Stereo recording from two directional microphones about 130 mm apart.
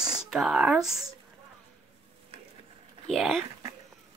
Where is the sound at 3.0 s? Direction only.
Centre (ahead or behind).